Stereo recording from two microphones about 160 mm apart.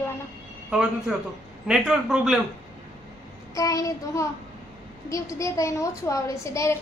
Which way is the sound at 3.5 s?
20° left (ahead or behind).